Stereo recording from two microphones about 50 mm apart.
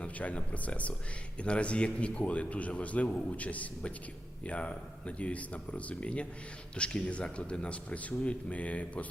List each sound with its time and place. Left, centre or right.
0.0 s a man's voice: left